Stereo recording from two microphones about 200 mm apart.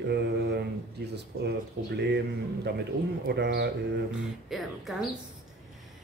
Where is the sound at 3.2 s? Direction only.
55° right (ahead or behind).